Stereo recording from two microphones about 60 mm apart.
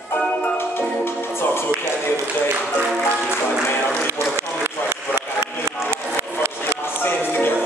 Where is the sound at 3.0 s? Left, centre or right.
Centre.